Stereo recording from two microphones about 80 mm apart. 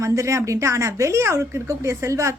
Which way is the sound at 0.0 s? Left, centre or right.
Right.